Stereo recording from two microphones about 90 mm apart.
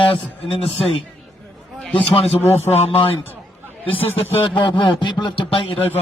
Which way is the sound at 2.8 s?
90° left.